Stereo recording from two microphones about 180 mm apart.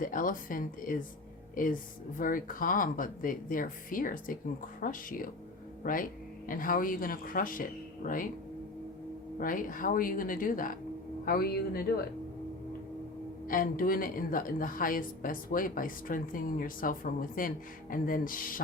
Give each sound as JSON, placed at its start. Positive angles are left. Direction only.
{"t": 0.0, "sound": "a woman's voice", "side_deg": 50}
{"t": 9.4, "sound": "a woman's voice", "side_deg": 50}
{"t": 13.5, "sound": "a woman's voice", "side_deg": 50}